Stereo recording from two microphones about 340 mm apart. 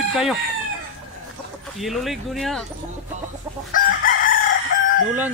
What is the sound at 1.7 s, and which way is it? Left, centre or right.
Speech, centre.